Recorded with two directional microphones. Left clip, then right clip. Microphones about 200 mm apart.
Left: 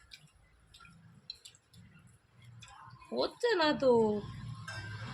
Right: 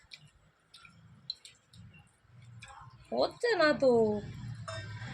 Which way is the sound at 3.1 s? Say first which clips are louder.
Right 2 dB; 25° left (ahead or behind).